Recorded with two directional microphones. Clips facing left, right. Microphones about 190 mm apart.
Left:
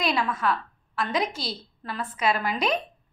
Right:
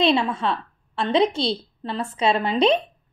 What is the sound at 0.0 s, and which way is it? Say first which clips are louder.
A woman's voice: right 5 dB; 25° right (ahead or behind).